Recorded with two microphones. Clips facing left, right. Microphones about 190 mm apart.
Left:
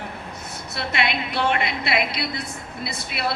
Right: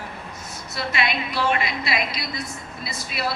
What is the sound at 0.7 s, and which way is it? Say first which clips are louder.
A woman's voice: even; 60° left (ahead or behind).